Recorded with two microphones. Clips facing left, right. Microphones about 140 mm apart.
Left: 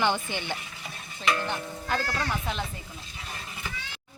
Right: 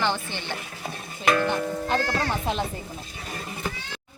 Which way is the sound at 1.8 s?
20° right (ahead or behind).